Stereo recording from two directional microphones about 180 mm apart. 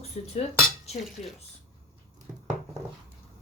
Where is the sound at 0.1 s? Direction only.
40° left (ahead or behind).